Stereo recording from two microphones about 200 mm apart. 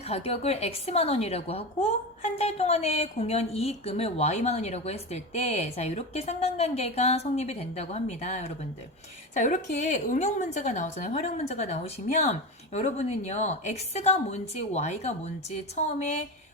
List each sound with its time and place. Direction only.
0.0 s a woman's voice: 30° left (ahead or behind)